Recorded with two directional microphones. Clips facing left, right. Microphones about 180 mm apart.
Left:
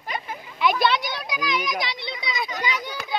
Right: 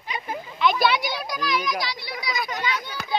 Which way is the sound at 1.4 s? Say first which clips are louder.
Even; 15° left (ahead or behind).